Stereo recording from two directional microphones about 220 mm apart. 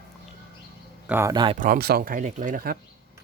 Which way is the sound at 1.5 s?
40° right (ahead or behind).